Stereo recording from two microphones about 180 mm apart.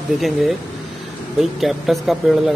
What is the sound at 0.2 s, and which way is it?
Speech, centre (ahead or behind).